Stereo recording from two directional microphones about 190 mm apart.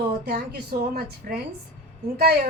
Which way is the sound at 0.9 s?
55° right (ahead or behind).